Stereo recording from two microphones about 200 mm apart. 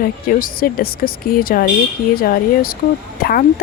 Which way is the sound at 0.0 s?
45° left (ahead or behind).